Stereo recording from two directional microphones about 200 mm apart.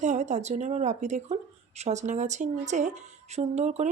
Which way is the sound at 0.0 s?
35° right (ahead or behind).